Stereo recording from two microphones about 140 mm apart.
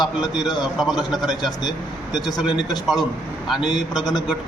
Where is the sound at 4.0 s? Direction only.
30° left (ahead or behind).